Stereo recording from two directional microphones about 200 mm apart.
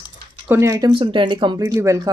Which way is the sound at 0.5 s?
15° right (ahead or behind).